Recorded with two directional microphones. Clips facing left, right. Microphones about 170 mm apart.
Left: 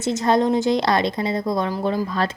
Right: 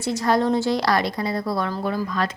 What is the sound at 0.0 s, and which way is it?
A woman's voice, 20° left (ahead or behind).